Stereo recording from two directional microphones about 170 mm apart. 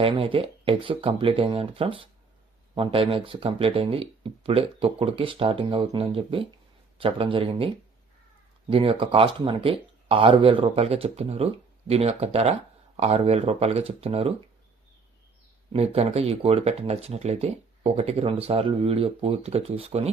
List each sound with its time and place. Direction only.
0.0 s speech: 30° right (ahead or behind)
8.7 s speech: 30° right (ahead or behind)
15.7 s speech: 35° right (ahead or behind)